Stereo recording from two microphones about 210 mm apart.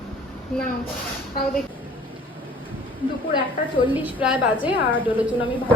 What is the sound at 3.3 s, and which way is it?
Speech, 25° left (ahead or behind).